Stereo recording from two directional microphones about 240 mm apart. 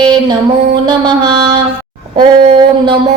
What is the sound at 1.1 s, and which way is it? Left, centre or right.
Mantra, centre.